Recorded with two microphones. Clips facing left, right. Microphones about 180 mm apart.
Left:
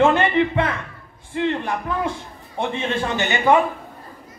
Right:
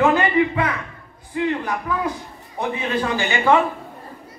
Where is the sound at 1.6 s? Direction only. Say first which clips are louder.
Even; 25° left (ahead or behind).